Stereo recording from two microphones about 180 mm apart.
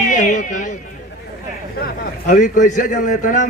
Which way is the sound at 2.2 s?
45° left (ahead or behind).